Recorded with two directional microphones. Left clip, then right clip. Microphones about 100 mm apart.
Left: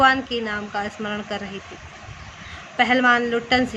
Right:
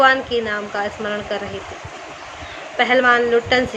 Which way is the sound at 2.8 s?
40° left (ahead or behind).